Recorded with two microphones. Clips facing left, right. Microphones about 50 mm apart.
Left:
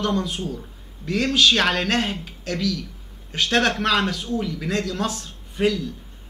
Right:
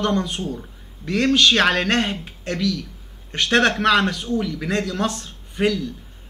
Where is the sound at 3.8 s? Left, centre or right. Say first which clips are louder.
Right 4 dB; right.